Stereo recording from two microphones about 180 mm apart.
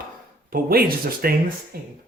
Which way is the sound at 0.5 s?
55° right (ahead or behind).